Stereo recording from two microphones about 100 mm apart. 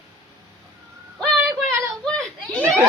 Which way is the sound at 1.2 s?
5° left (ahead or behind).